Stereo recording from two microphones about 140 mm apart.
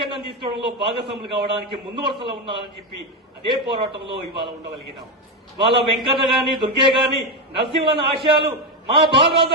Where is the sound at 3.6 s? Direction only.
35° right (ahead or behind).